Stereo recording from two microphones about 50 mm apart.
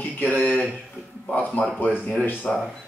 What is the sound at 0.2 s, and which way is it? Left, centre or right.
Speech, left.